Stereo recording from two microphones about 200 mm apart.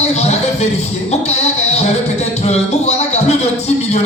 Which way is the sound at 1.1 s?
35° left (ahead or behind).